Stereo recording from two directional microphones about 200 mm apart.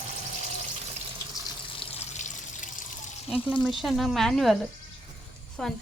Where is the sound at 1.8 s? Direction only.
30° left (ahead or behind).